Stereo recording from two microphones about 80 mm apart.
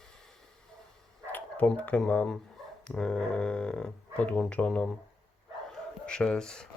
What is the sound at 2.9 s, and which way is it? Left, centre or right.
Speech, centre.